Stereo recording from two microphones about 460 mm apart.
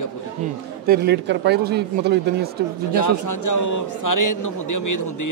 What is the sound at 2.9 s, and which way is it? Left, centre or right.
A man's voice, left.